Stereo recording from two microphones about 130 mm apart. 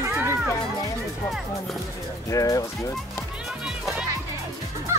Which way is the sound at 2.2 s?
25° left (ahead or behind).